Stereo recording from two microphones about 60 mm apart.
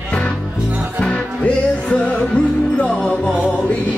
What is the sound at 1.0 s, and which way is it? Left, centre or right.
Music, centre.